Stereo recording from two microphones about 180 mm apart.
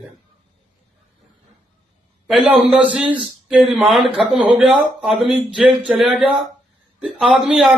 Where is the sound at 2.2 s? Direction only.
Centre (ahead or behind).